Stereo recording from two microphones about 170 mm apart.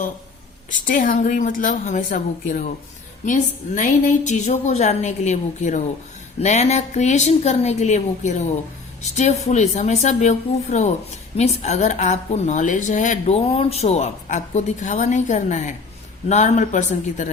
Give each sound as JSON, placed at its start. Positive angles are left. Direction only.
{"t": 0.7, "sound": "a woman's voice", "side_deg": 55}